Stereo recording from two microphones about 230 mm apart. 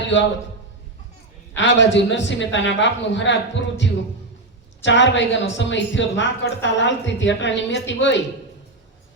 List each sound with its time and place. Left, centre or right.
0.1 s a woman's voice: left
1.5 s a woman's voice: left
4.9 s a woman's voice: left